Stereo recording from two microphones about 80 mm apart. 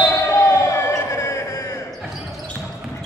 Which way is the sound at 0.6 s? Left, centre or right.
Left.